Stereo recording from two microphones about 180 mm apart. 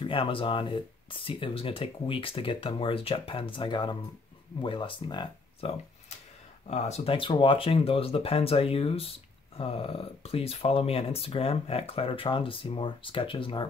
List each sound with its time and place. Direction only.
0.1 s speech: 30° left (ahead or behind)
6.7 s speech: 35° left (ahead or behind)